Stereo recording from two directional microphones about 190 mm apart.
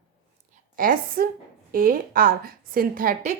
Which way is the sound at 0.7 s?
50° right (ahead or behind).